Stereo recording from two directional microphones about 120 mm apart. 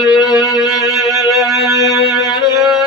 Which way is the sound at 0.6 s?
35° left (ahead or behind).